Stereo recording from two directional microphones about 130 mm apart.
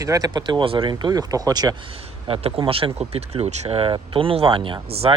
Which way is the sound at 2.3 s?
45° right (ahead or behind).